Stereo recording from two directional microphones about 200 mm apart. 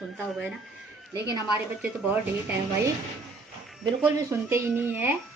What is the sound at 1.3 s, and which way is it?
Speech, 20° left (ahead or behind).